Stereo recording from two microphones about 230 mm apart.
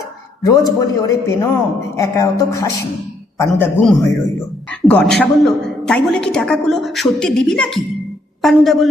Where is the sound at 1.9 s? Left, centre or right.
Centre.